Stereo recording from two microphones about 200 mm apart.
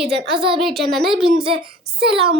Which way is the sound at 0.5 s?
Centre (ahead or behind).